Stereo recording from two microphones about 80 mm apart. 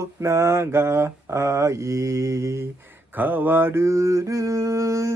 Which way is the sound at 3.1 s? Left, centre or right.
Right.